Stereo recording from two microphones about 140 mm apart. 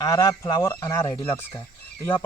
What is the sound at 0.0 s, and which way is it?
Speech, 25° left (ahead or behind).